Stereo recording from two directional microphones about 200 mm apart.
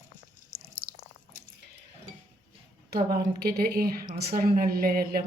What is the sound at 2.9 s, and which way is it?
A woman's voice, 50° right (ahead or behind).